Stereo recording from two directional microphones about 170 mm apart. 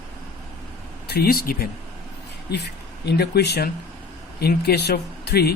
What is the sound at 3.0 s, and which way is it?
Speech, 75° left (ahead or behind).